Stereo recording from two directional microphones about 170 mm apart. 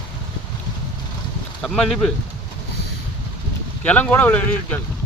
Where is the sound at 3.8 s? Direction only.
10° left (ahead or behind).